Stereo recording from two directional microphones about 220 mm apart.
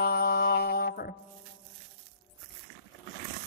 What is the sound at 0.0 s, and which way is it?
Mantra, 45° left (ahead or behind).